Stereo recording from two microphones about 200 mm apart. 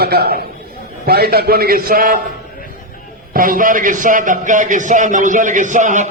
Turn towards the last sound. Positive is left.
turn(degrees=-40)  # may be behind; listen again after turning